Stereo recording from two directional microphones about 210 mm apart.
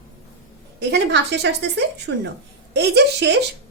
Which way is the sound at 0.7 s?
55° right (ahead or behind).